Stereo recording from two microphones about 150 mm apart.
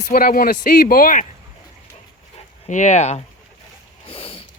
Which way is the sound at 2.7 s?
55° left (ahead or behind).